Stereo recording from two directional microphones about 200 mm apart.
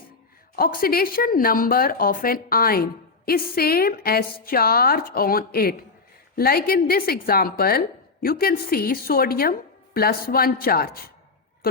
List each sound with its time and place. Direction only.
0.5 s a woman's voice: 45° left (ahead or behind)